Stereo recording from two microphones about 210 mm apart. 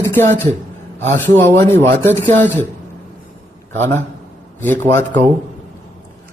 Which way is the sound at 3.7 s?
10° left (ahead or behind).